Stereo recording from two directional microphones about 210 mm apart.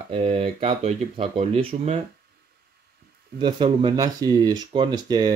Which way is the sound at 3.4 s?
25° right (ahead or behind).